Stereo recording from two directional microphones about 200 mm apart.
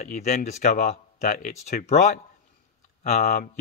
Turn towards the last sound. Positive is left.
turn(degrees=40)  # may be behind; listen again after turning